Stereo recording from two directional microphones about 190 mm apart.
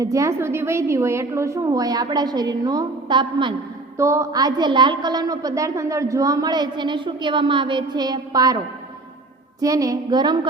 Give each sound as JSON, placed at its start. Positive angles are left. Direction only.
{"t": 0.0, "sound": "a woman's voice", "side_deg": -15}